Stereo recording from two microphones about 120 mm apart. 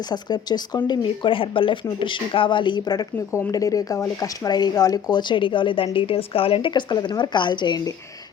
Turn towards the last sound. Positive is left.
turn(degrees=35)  # may be behind; listen again after turning